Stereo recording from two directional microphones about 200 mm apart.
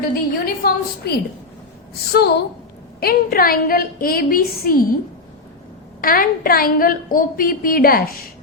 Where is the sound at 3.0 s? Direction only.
50° left (ahead or behind).